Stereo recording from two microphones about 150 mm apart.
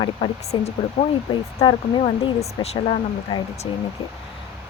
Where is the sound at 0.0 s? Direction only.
45° left (ahead or behind).